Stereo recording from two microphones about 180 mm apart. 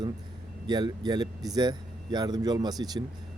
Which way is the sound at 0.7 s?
25° right (ahead or behind).